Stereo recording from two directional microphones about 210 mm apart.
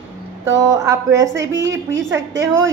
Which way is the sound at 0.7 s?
15° right (ahead or behind).